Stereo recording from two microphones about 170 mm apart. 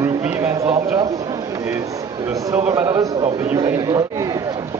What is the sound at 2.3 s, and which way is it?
A man's voice, 15° right (ahead or behind).